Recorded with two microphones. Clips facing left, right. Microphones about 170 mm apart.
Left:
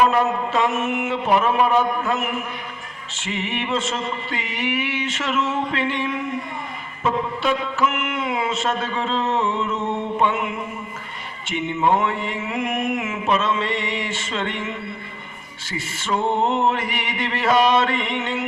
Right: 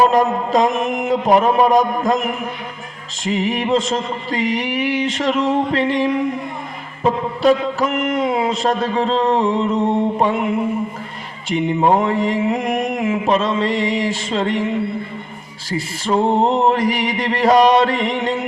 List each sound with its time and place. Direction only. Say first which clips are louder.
0.0 s a man's voice: right 4 dB; 35° right (ahead or behind)